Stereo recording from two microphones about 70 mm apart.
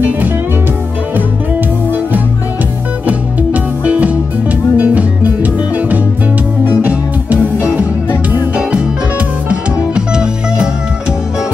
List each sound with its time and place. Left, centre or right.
3.8 s music: centre